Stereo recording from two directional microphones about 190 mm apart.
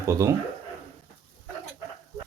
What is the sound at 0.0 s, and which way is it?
Speech, 15° right (ahead or behind).